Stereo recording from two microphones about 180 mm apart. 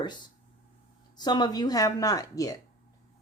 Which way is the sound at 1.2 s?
25° left (ahead or behind).